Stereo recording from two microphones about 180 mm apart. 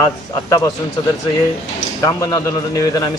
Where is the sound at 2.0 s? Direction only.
20° left (ahead or behind).